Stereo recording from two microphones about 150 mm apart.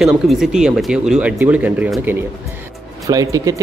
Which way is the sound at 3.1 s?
20° right (ahead or behind).